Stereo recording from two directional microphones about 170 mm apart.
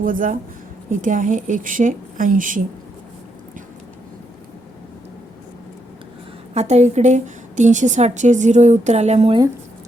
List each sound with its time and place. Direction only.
0.0 s a woman's voice: 50° right (ahead or behind)
6.5 s a woman's voice: 40° right (ahead or behind)